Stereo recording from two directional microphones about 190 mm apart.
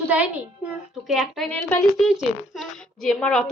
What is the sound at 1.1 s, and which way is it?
A woman's voice, centre (ahead or behind).